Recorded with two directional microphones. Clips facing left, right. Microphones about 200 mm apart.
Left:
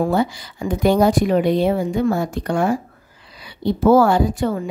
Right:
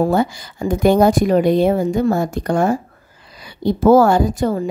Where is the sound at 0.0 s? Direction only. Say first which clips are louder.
Right 2 dB; 45° right (ahead or behind).